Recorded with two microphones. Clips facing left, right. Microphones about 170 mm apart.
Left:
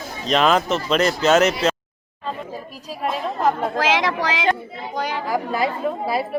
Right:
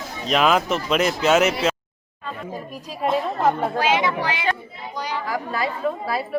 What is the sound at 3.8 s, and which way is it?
Speech, 90° left.